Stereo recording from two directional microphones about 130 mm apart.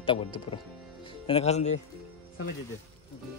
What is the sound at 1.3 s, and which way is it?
Speech, 55° left (ahead or behind).